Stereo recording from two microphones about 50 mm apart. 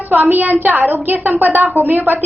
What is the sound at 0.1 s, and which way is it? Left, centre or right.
A woman's voice, right.